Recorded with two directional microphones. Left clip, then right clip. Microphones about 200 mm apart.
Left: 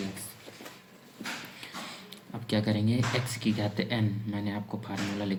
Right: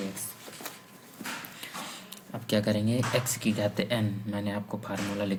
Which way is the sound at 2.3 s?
30° right (ahead or behind).